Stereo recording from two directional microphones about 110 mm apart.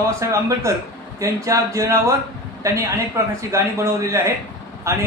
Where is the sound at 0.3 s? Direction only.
30° right (ahead or behind).